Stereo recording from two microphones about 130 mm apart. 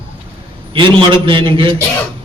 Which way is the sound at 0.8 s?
40° right (ahead or behind).